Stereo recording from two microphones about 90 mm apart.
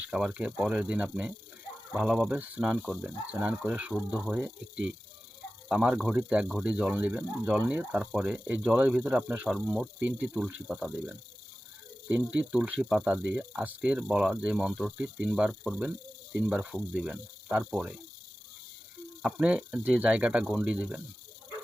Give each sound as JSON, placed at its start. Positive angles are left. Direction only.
{"t": 0.0, "sound": "speech", "side_deg": -15}
{"t": 19.2, "sound": "speech", "side_deg": -15}